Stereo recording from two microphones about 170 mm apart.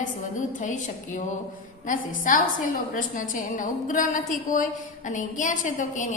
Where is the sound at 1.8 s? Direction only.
50° left (ahead or behind).